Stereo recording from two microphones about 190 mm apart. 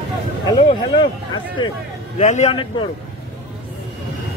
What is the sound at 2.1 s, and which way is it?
Speech, 35° left (ahead or behind).